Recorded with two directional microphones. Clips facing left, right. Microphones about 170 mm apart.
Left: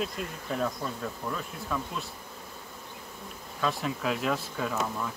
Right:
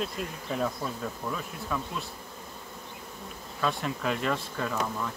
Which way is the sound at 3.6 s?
Centre (ahead or behind).